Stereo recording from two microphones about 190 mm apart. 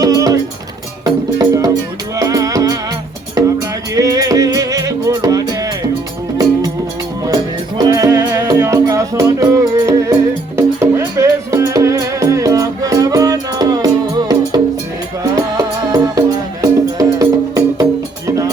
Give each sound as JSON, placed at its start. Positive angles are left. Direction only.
{"t": 0.0, "sound": "music", "side_deg": -20}
{"t": 7.8, "sound": "music", "side_deg": -20}